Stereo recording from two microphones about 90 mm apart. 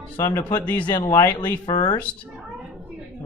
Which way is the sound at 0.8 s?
55° left (ahead or behind).